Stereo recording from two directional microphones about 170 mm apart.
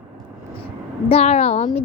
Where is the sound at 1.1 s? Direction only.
35° left (ahead or behind).